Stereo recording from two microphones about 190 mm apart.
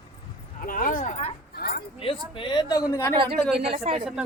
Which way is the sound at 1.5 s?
55° left (ahead or behind).